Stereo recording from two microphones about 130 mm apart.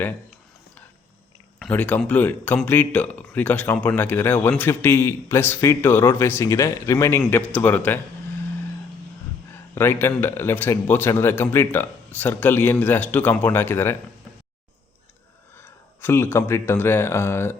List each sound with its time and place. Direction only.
1.7 s speech: 10° left (ahead or behind)
9.5 s speech: 20° left (ahead or behind)
15.5 s speech: 20° left (ahead or behind)